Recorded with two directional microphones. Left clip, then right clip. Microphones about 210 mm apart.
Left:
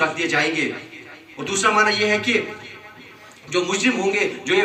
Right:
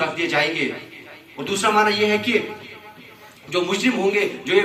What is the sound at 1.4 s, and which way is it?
Speech, centre (ahead or behind).